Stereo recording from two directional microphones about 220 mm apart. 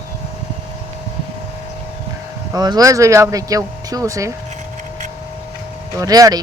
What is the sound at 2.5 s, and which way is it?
Speech, 15° right (ahead or behind).